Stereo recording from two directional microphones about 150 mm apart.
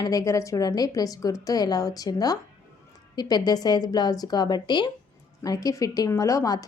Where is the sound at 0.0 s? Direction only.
25° left (ahead or behind).